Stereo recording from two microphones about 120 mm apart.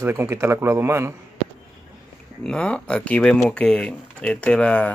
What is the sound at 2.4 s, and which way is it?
Speech, 10° left (ahead or behind).